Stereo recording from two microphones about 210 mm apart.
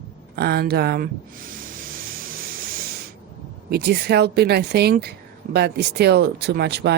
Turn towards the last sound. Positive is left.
turn(degrees=-50)  # may be behind; listen again after turning